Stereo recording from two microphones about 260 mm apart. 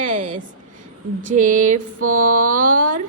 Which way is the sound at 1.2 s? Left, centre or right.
Right.